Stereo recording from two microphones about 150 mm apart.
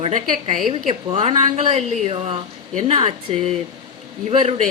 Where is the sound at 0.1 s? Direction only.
55° right (ahead or behind).